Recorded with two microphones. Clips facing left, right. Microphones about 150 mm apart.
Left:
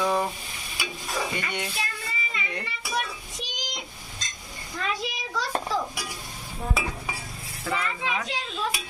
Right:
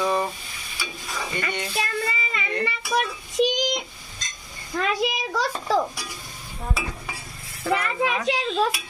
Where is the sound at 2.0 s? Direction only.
70° right (ahead or behind).